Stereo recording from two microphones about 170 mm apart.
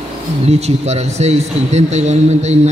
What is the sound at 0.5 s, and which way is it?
A man's voice, 40° right (ahead or behind).